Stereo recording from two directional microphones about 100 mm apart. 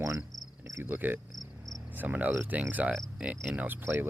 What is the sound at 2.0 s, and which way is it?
Cricket, 15° right (ahead or behind).